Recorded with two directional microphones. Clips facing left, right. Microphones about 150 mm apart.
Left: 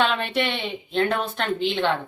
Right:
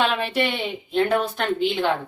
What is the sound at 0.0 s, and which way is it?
Speech, 5° right (ahead or behind).